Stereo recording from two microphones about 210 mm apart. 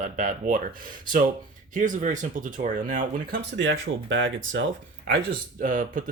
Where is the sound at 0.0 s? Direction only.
40° right (ahead or behind).